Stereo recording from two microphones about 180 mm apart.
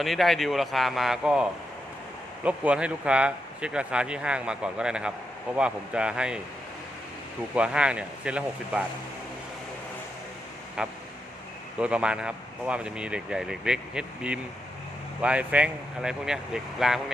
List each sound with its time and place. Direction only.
0.0 s speech: centre (ahead or behind)
7.5 s speech: 5° right (ahead or behind)
10.8 s speech: 5° right (ahead or behind)